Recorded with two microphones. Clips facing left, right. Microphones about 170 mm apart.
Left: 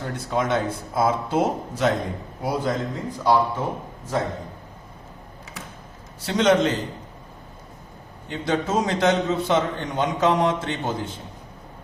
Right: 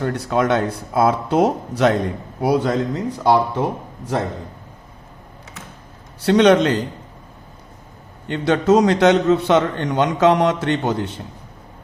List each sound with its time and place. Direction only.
0.0 s a man's voice: 70° right (ahead or behind)
6.2 s a man's voice: 70° right (ahead or behind)
8.3 s a man's voice: 70° right (ahead or behind)